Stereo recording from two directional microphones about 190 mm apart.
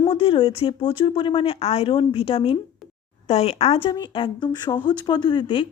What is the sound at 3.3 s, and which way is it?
Speech, 35° left (ahead or behind).